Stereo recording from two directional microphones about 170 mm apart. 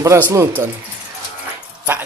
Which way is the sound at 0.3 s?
15° right (ahead or behind).